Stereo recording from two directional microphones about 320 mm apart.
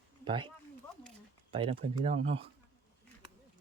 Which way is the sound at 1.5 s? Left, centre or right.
Centre.